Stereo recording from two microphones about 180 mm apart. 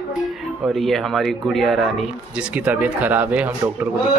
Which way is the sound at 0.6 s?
Centre (ahead or behind).